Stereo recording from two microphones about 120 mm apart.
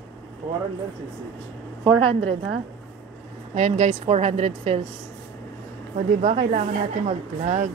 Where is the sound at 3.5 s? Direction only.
75° right (ahead or behind); by 4.8 s 60° right (ahead or behind).